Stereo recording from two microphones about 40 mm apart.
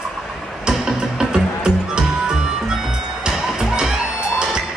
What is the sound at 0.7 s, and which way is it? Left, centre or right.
Music, centre.